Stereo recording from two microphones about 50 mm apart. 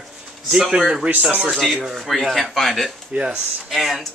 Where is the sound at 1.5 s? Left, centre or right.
Centre.